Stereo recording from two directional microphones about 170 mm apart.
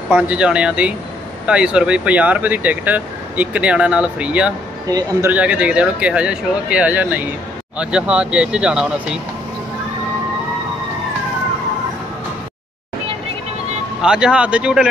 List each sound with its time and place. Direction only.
0.1 s speech: 5° right (ahead or behind)
4.8 s a man's voice: 20° right (ahead or behind)
5.3 s speech: 5° right (ahead or behind)
14.0 s speech: 5° right (ahead or behind)